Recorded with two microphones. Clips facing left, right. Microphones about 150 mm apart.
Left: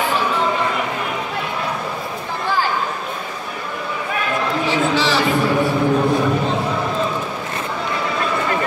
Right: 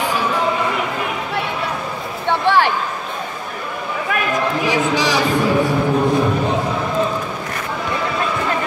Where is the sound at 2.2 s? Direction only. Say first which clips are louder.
Right 7 dB; 80° right.